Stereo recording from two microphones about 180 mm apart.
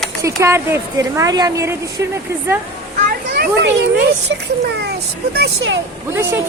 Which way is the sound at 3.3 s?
80° right.